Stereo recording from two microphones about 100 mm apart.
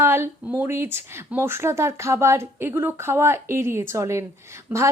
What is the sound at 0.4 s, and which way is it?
A woman's voice, 20° right (ahead or behind).